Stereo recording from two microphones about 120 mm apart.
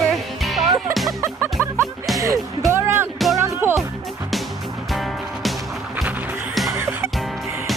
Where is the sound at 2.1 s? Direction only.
25° right (ahead or behind).